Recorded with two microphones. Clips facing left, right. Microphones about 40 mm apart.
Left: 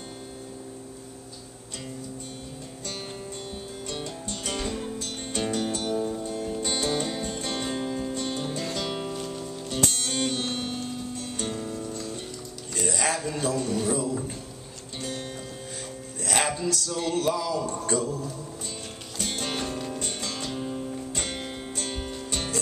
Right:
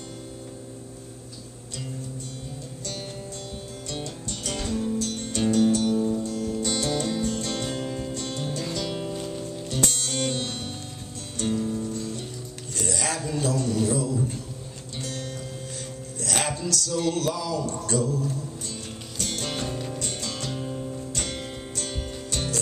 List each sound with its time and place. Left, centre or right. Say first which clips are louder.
3.9 s music: right 1 dB; centre
9.1 s music: right 1 dB; centre
9.8 s music: even; centre
12.7 s a sound: left 2 dB; left
16.2 s music: left 2 dB; centre
21.1 s music: even; left